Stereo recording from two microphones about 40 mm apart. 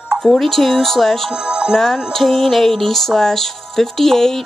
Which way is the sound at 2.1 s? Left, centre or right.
Centre.